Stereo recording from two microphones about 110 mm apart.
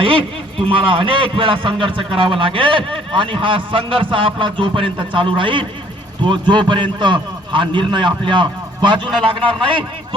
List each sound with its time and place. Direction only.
0.0 s a man's voice: 55° right (ahead or behind)